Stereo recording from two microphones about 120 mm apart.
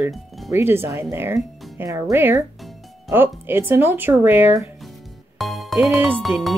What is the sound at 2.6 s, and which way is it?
Music, centre (ahead or behind).